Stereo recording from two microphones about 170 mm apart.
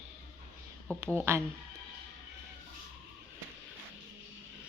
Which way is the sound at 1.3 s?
15° right (ahead or behind).